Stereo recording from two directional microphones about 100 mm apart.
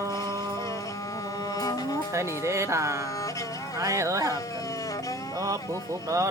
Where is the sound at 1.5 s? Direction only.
35° left (ahead or behind).